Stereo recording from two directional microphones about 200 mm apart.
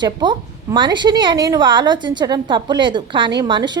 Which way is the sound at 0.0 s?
20° right (ahead or behind).